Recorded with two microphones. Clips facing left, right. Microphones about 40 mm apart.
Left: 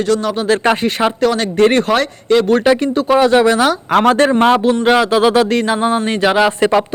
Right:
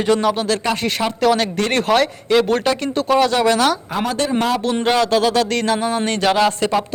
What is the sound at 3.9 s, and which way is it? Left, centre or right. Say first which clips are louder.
Speech: left 10 dB; left.